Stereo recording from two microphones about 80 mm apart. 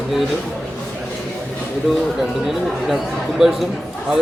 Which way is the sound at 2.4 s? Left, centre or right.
Centre.